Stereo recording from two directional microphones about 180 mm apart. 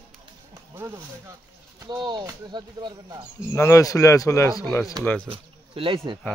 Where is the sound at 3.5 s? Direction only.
15° left (ahead or behind).